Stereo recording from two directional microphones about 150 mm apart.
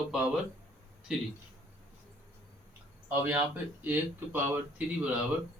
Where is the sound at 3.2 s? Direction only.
10° right (ahead or behind).